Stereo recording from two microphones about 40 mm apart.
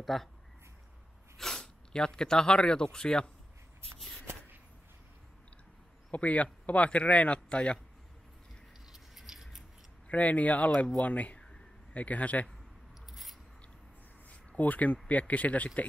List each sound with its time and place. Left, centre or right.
0.0 s speech: centre
1.6 s speech: centre
6.1 s speech: left
9.1 s scissors: centre
10.0 s speech: left
13.1 s a sound: centre
14.6 s speech: left